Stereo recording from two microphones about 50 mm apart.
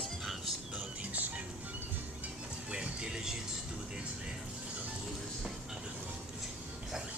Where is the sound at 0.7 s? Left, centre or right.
Right.